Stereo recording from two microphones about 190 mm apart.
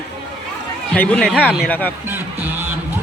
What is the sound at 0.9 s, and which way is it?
Speech, 5° left (ahead or behind).